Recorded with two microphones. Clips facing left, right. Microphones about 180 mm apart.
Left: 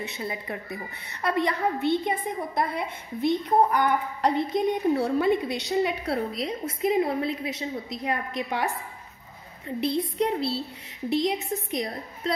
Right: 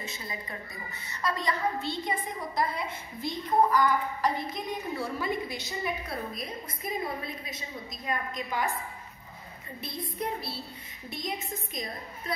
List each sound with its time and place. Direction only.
0.0 s a woman's voice: 65° left (ahead or behind)
9.8 s a woman's voice: 70° left (ahead or behind)